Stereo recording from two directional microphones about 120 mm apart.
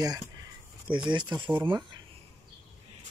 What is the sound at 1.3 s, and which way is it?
Speech, 10° right (ahead or behind).